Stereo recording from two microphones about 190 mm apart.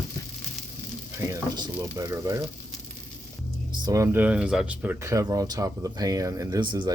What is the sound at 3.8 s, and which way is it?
Speech, 15° right (ahead or behind).